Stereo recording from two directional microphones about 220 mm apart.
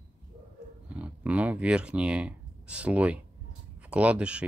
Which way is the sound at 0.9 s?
5° right (ahead or behind).